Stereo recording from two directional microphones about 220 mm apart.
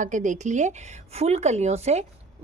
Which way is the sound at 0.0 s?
35° right (ahead or behind).